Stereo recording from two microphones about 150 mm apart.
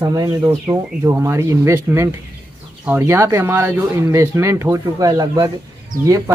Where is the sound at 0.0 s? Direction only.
25° right (ahead or behind).